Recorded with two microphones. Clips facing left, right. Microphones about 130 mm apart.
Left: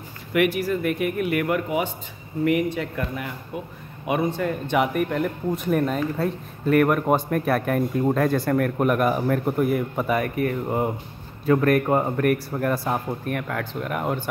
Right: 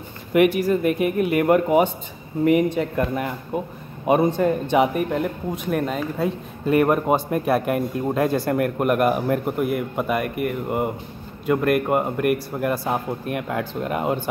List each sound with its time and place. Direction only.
0.3 s speech: 20° right (ahead or behind)
1.5 s speech: 40° right (ahead or behind)
2.4 s speech: 30° right (ahead or behind)
3.0 s speech: 40° right (ahead or behind); by 5.3 s 25° right (ahead or behind)
5.8 s a man's voice: 10° right (ahead or behind)
6.7 s a man's voice: 25° right (ahead or behind)